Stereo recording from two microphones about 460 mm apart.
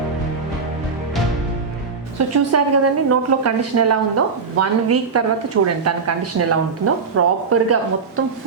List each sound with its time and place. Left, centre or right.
2.1 s speech: right